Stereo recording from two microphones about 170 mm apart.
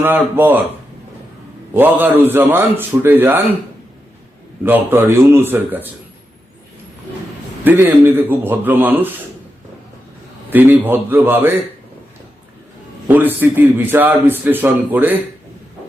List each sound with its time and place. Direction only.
0.0 s a man's voice: 10° right (ahead or behind)
1.7 s a man's voice: 10° right (ahead or behind)
4.6 s a man's voice: 10° right (ahead or behind)
7.6 s a man's voice: 10° right (ahead or behind)
10.5 s a man's voice: 10° right (ahead or behind)
13.1 s a man's voice: 10° right (ahead or behind)